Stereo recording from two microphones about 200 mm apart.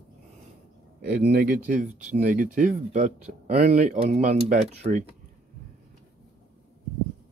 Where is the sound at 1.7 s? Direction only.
40° right (ahead or behind).